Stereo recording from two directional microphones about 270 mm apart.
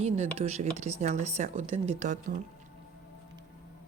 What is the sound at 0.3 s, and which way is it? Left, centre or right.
Speech, right.